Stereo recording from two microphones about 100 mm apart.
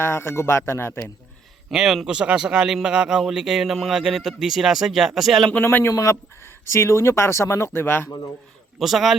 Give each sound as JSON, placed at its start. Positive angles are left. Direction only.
{"t": 0.0, "sound": "speech", "side_deg": 25}
{"t": 1.7, "sound": "speech", "side_deg": -5}
{"t": 5.6, "sound": "speech", "side_deg": 25}
{"t": 8.8, "sound": "speech", "side_deg": 0}